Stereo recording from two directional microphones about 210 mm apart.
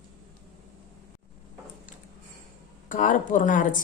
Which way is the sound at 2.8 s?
40° left (ahead or behind).